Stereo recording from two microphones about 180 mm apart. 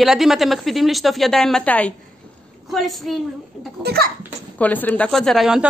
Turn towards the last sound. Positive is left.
turn(degrees=0)  # may be behind; listen again after turning